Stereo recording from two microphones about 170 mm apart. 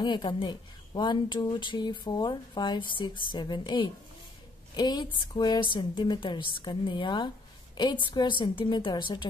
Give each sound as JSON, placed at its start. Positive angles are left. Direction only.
{"t": 0.0, "sound": "speech", "side_deg": 25}